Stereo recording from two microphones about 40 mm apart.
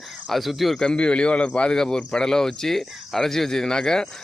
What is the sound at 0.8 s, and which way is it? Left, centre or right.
Speech, left.